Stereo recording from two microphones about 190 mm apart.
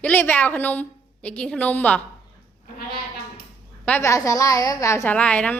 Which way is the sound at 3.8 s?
10° left (ahead or behind).